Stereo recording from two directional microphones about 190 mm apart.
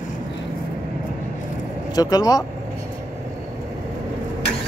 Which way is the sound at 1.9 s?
20° left (ahead or behind).